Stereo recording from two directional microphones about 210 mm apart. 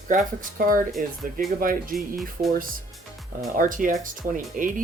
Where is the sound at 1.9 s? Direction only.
Centre (ahead or behind).